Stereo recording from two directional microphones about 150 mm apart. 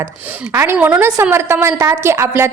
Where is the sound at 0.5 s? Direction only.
15° right (ahead or behind).